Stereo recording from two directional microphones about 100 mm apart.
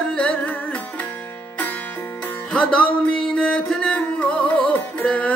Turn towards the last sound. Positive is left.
turn(degrees=10)  # may be behind; listen again after turning